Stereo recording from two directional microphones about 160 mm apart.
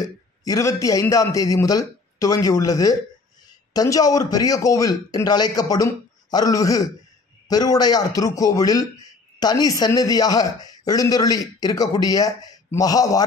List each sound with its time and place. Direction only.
0.0 s a man's voice: 20° left (ahead or behind)